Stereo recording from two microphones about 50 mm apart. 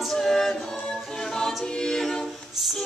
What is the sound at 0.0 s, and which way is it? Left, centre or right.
A capella, centre.